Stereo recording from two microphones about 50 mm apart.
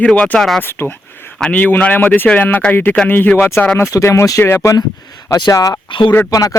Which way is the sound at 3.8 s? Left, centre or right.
Left.